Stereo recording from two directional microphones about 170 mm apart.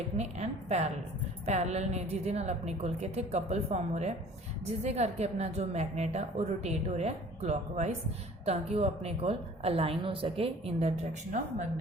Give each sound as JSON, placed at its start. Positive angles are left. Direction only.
{"t": 0.2, "sound": "a woman's voice", "side_deg": -40}